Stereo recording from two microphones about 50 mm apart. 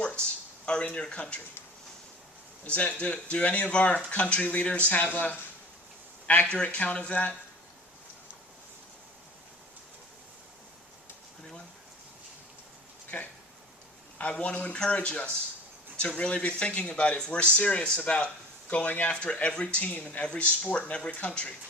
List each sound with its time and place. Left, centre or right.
0.2 s speech: centre
2.6 s speech: left
14.3 s speech: left